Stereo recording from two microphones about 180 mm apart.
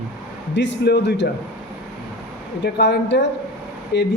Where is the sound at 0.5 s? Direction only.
75° left (ahead or behind).